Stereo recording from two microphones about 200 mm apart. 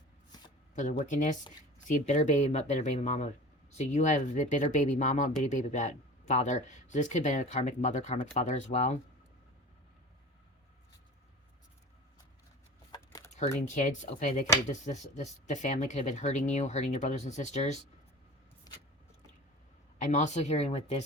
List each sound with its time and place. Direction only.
0.8 s speech: 40° left (ahead or behind)
12.9 s a sound: 15° left (ahead or behind)
13.7 s speech: 35° left (ahead or behind)
18.7 s vehicle: 20° left (ahead or behind)
20.0 s speech: 35° left (ahead or behind)